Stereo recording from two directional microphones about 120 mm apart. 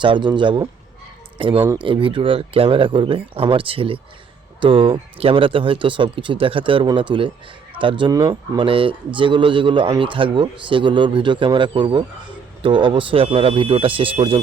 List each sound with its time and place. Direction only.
0.0 s a man's voice: 40° right (ahead or behind)